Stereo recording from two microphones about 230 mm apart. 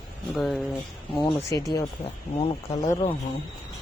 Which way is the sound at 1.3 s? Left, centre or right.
Centre.